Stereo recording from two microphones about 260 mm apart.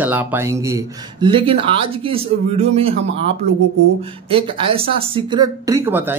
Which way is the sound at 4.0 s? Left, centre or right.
Right.